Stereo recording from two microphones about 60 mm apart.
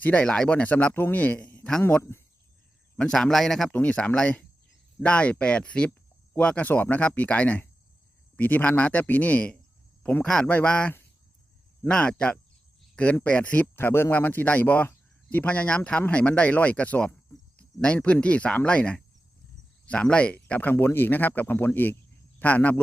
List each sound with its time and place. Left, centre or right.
0.0 s speech: centre
2.0 s speech: left
3.1 s a man's voice: centre
3.7 s speech: left
10.2 s a man's voice: centre
13.7 s speech: left
20.7 s speech: left